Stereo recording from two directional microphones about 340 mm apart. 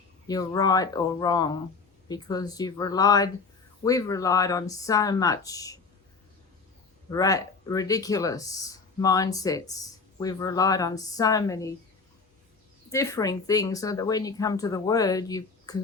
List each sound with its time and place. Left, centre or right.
0.3 s speech: centre
7.1 s speech: centre
12.9 s speech: centre